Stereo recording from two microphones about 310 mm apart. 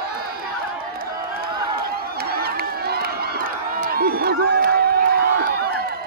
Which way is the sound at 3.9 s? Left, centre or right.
Right.